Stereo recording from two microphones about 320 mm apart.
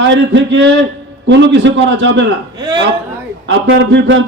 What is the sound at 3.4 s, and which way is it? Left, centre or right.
Speech, right.